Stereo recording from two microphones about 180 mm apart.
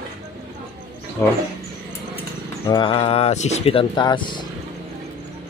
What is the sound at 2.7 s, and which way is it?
Speech, 30° left (ahead or behind).